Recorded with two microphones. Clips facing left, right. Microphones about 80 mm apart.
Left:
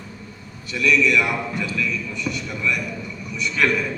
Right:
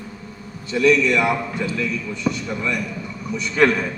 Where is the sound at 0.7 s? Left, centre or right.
Right.